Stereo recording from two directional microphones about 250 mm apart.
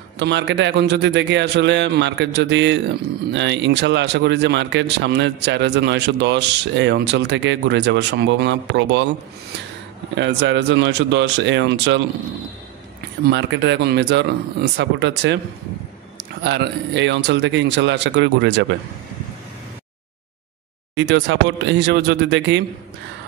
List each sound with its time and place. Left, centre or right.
0.2 s speech: right
10.1 s speech: right
13.3 s speech: right
16.4 s speech: right
20.9 s speech: right